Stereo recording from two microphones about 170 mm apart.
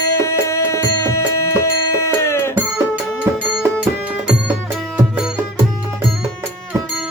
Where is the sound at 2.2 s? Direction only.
15° left (ahead or behind).